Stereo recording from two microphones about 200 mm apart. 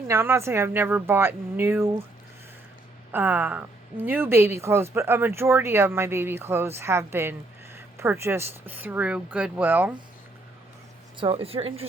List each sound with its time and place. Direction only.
0.1 s speech: 15° right (ahead or behind)
3.1 s speech: 10° right (ahead or behind)
11.2 s a woman's voice: 30° right (ahead or behind)